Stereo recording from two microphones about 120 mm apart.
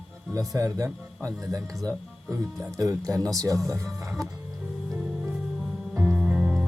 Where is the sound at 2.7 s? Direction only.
30° right (ahead or behind).